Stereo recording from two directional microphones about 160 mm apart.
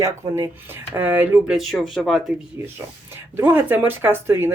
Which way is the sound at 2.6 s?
15° right (ahead or behind).